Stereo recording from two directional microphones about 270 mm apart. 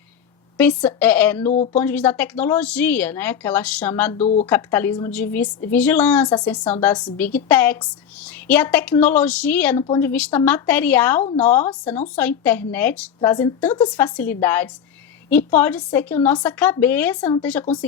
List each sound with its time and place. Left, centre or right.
0.5 s speech: centre
1.5 s speech: left
1.8 s speech: centre
4.2 s speech: left
4.4 s speech: centre